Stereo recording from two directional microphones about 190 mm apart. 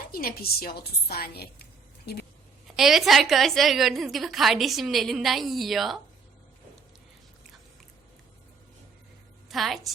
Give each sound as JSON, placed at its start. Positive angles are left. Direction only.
{"t": 0.1, "sound": "a woman's voice", "side_deg": 50}
{"t": 2.7, "sound": "a woman's voice", "side_deg": 0}
{"t": 9.5, "sound": "a woman's voice", "side_deg": 0}